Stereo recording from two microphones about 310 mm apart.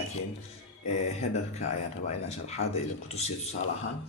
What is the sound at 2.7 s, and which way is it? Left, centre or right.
Speech, left.